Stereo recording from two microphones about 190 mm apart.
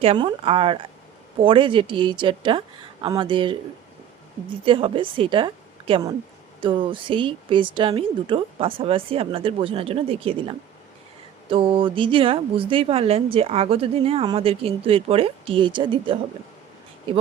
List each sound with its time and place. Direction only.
0.0 s a woman's voice: 30° right (ahead or behind)